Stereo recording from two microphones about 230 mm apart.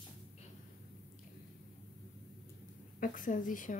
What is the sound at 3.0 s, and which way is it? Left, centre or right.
Speech, left.